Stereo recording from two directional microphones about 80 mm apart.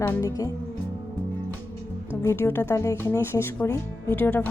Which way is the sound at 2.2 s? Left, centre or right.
Left.